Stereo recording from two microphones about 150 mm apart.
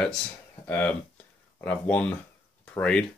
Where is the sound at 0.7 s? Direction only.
10° left (ahead or behind).